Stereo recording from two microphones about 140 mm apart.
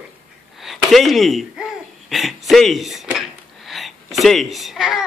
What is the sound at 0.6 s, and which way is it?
Speech, centre (ahead or behind).